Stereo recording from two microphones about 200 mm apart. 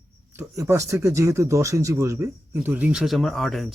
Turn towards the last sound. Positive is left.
turn(degrees=0)  # may be behind; listen again after turning